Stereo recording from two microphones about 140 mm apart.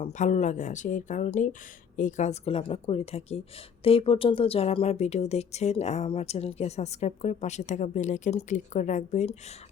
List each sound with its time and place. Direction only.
0.0 s a woman's voice: 60° left (ahead or behind)